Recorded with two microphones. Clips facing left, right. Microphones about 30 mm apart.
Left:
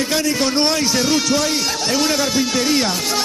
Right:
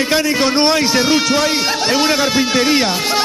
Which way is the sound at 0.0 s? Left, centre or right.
Right.